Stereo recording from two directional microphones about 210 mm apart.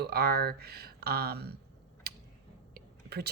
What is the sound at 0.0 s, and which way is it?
Speech, 50° right (ahead or behind).